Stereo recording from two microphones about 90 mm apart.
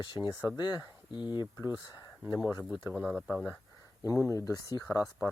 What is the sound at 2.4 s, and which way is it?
Speech, 20° right (ahead or behind).